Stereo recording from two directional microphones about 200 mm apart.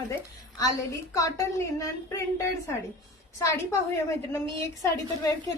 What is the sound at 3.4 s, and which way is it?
Speech, 15° left (ahead or behind).